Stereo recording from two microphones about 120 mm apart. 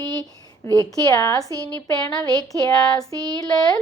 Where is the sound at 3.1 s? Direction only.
30° right (ahead or behind).